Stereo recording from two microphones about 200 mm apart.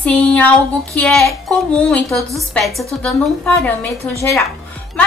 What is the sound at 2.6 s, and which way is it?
Speech, centre (ahead or behind).